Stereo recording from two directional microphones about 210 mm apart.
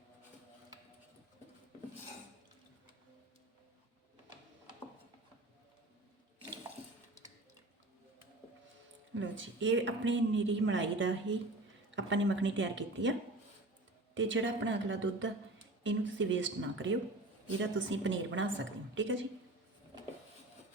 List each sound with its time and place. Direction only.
9.1 s a woman's voice: 65° right (ahead or behind)